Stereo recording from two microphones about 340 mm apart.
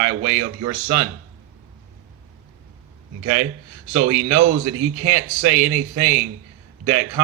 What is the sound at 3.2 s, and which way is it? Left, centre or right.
Speech, right.